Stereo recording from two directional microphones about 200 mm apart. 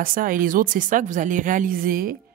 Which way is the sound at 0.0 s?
45° right (ahead or behind).